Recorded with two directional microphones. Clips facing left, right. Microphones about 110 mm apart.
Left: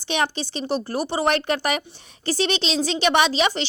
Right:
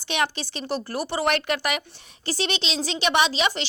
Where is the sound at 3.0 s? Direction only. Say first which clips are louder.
Left 2 dB; 35° left (ahead or behind).